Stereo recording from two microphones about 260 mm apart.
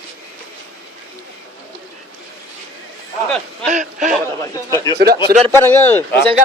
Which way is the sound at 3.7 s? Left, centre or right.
Right.